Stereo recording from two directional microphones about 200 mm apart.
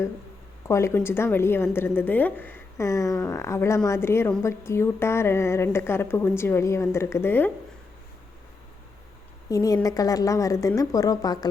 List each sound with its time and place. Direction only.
0.7 s a woman's voice: 15° left (ahead or behind)
9.5 s a woman's voice: 15° left (ahead or behind)